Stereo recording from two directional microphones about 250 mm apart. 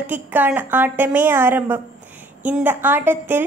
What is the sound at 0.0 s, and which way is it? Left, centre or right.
A woman's voice, centre.